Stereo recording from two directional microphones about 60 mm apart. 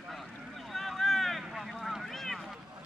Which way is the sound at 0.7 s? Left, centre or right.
Centre.